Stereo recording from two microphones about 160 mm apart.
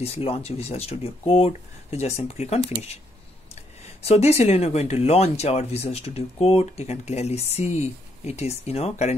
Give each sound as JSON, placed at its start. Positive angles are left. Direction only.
{"t": 0.0, "sound": "speech", "side_deg": 40}